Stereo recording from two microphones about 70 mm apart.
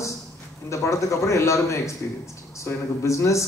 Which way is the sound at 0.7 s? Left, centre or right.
Left.